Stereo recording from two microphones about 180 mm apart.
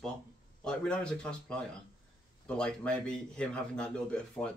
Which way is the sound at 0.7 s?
5° left (ahead or behind).